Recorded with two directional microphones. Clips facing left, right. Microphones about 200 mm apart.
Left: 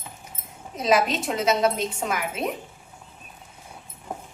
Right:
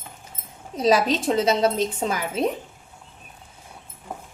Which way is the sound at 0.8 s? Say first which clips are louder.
Right 2 dB; 35° right (ahead or behind).